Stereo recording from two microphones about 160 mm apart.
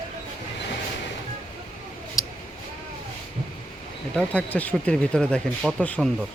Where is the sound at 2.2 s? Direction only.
20° left (ahead or behind).